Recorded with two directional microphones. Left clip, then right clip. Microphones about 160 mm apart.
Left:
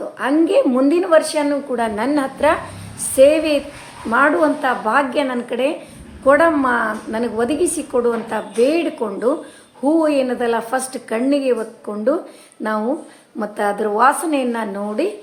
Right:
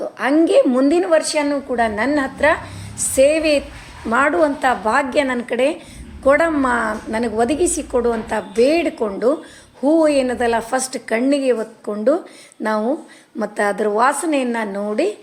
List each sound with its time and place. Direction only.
0.2 s a woman's voice: 30° right (ahead or behind); by 2.6 s 5° right (ahead or behind)
3.2 s a woman's voice: 25° right (ahead or behind)